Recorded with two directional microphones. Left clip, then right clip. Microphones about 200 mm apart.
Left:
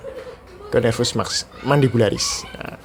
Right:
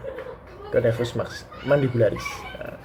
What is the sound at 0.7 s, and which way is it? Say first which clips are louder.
Speech: left 3 dB; 35° left (ahead or behind).